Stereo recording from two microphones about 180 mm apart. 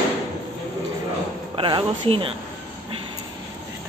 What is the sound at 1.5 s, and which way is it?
Speech, 30° right (ahead or behind).